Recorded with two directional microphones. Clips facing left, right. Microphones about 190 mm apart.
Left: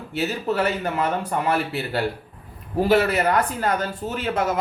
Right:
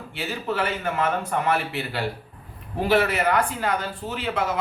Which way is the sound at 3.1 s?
40° left (ahead or behind).